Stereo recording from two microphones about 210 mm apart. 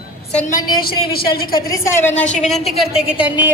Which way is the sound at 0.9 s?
45° left (ahead or behind).